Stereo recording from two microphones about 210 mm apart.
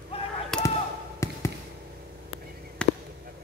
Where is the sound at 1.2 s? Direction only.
15° left (ahead or behind).